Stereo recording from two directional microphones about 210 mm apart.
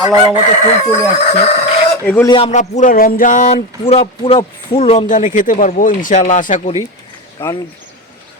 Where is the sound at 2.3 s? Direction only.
30° left (ahead or behind).